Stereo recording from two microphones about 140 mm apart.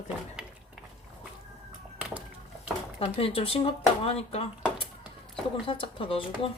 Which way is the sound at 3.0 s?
45° left (ahead or behind).